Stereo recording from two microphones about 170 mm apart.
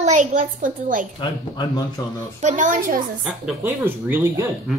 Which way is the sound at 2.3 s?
45° right (ahead or behind).